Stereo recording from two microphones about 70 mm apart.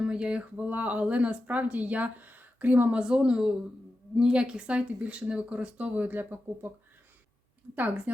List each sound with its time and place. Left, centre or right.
0.0 s speech: centre
3.0 s speech: centre
7.8 s speech: right